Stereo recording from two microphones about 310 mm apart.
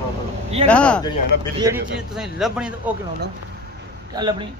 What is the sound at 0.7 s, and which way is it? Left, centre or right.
Speech, centre.